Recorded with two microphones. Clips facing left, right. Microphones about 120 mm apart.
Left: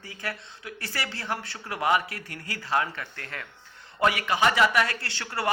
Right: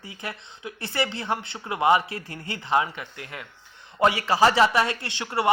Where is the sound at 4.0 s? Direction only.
30° right (ahead or behind).